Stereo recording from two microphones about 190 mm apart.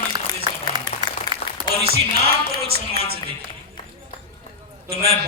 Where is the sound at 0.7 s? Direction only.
20° right (ahead or behind).